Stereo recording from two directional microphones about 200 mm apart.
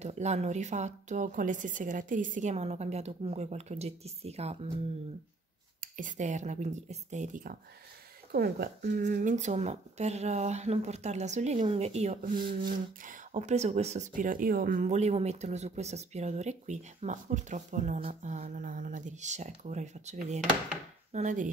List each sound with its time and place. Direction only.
0.0 s speech: 35° right (ahead or behind)
5.9 s speech: 40° right (ahead or behind)
8.3 s speech: 50° right (ahead or behind)
9.0 s speech: 40° right (ahead or behind)